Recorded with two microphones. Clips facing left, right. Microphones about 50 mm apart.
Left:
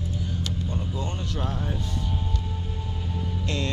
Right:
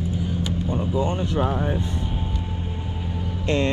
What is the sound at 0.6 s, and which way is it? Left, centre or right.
Speech, centre.